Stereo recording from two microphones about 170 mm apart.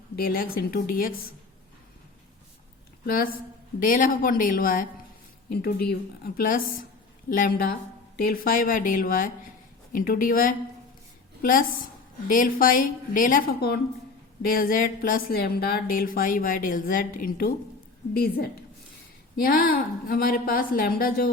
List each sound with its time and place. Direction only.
0.2 s speech: 60° left (ahead or behind)
3.1 s speech: 60° left (ahead or behind)
5.5 s speech: 70° left (ahead or behind)
12.3 s speech: 55° left (ahead or behind)